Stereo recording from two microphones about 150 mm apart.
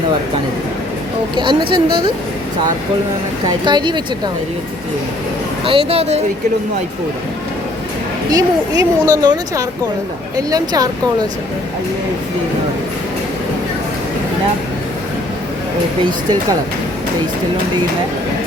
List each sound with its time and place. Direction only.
1.4 s a woman's voice: 35° right (ahead or behind)
3.4 s speech: 30° right (ahead or behind)
5.6 s a woman's voice: 40° right (ahead or behind)
8.3 s speech: 25° right (ahead or behind)
16.0 s speech: 25° right (ahead or behind)